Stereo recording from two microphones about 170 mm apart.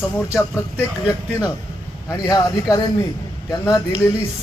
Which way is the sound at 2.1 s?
20° left (ahead or behind).